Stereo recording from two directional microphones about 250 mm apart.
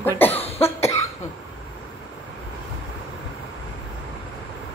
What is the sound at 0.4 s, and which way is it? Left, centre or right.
Cough, left.